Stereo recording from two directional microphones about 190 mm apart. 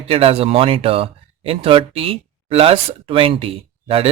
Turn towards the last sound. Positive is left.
turn(degrees=-30)  # may be behind; listen again after turning